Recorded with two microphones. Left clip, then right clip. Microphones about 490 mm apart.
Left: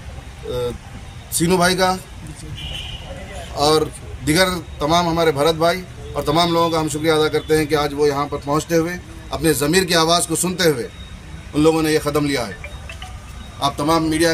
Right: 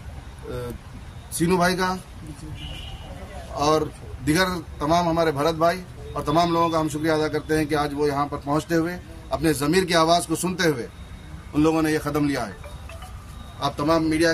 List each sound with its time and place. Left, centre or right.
1.4 s a man's voice: right
3.5 s a man's voice: right
13.6 s a man's voice: right